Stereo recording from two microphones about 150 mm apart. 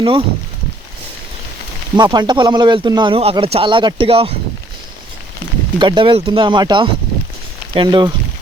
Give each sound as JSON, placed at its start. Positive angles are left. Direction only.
{"t": 0.0, "sound": "speech", "side_deg": -35}
{"t": 2.0, "sound": "speech", "side_deg": -30}
{"t": 5.8, "sound": "speech", "side_deg": -35}